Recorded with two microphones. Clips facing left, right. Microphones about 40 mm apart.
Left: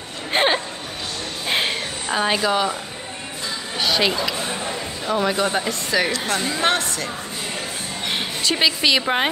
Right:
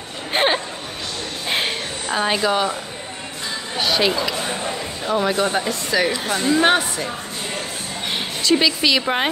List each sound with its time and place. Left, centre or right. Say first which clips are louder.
0.3 s a sound: even; centre
3.7 s speech: right 1 dB; centre
6.6 s speech: right 4 dB; centre
8.1 s speech: right 4 dB; centre